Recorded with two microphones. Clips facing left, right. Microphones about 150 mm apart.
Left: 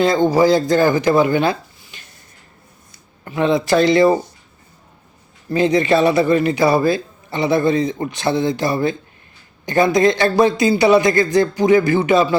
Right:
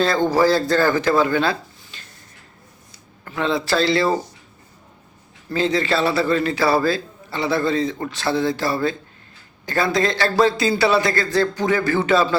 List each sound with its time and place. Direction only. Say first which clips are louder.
0.0 s speech: left 3 dB; 15° left (ahead or behind)
3.2 s a man's voice: left 5 dB; 20° left (ahead or behind)
5.5 s a man's voice: left 5 dB; 20° left (ahead or behind)